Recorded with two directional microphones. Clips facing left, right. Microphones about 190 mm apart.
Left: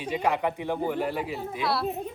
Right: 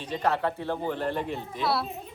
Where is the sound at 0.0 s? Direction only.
10° left (ahead or behind).